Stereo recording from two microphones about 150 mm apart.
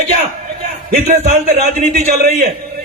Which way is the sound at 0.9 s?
50° right (ahead or behind).